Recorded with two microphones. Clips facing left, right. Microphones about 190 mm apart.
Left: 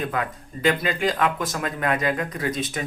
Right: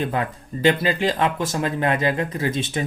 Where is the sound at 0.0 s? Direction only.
30° right (ahead or behind).